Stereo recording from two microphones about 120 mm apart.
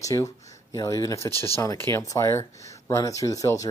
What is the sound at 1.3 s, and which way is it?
Speech, 55° left (ahead or behind).